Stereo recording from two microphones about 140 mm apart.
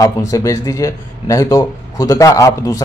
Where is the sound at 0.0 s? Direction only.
25° left (ahead or behind).